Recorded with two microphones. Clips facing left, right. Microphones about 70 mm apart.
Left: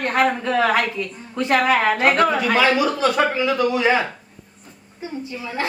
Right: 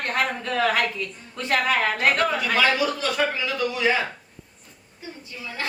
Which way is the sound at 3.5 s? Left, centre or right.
Left.